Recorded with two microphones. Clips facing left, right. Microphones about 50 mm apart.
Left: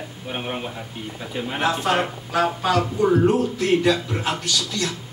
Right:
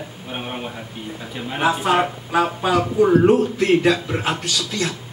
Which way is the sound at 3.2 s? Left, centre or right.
Right.